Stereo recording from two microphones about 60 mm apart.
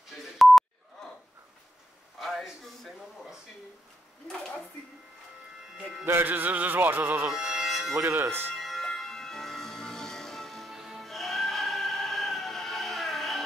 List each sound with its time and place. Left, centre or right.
0.1 s a sound: centre
2.1 s a sound: centre
6.0 s music: right
7.2 s music: centre
7.9 s music: right
8.5 s music: centre